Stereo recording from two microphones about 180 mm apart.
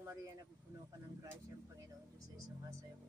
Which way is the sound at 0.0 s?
15° right (ahead or behind).